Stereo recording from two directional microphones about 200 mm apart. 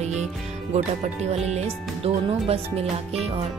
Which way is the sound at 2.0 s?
30° right (ahead or behind).